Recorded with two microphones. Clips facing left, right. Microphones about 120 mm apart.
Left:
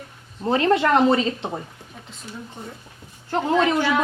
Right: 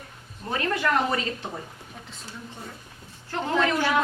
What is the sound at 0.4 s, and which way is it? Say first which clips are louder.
Speech: left 8 dB; 25° left (ahead or behind).